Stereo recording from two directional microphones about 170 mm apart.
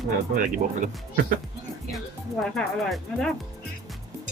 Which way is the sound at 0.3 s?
50° right (ahead or behind).